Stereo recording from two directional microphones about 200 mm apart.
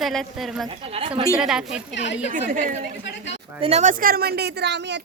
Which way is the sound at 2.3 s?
40° right (ahead or behind).